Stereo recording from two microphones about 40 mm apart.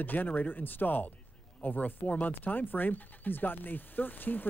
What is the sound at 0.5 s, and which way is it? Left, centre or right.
Speech, left.